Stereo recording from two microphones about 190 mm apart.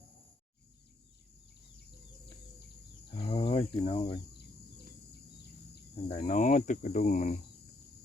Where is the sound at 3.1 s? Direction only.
30° left (ahead or behind).